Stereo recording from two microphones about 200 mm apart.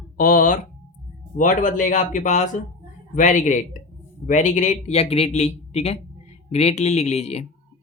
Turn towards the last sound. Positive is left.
turn(degrees=30)  # may be behind; listen again after turning